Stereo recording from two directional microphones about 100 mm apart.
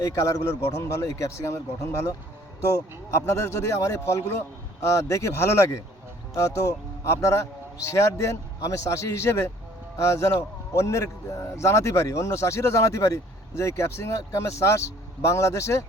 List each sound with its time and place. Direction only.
0.0 s a man's voice: 30° left (ahead or behind)